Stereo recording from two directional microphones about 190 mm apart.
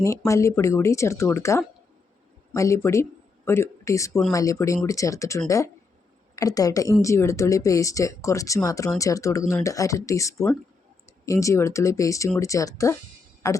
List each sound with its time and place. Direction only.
0.3 s speech: 15° left (ahead or behind)